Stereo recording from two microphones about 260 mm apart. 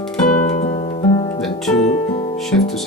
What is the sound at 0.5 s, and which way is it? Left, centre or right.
Music, left.